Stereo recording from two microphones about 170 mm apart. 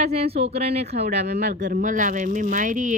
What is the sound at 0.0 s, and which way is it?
Speech, 35° right (ahead or behind).